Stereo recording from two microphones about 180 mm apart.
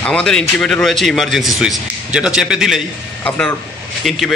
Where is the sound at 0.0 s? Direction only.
5° left (ahead or behind).